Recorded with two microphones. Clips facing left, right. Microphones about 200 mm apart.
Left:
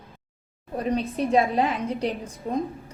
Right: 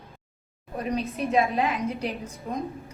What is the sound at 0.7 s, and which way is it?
A woman's voice, 30° left (ahead or behind).